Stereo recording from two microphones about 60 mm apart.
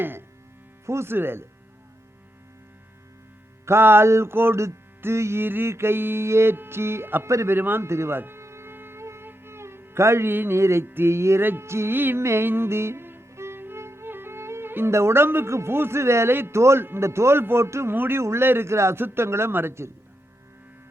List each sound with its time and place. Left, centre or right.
0.0 s speech: right
0.9 s music: right
3.7 s music: right
4.6 s music: right
7.3 s speech: right
7.5 s music: right
7.9 s music: right
17.9 s music: right
18.2 s music: right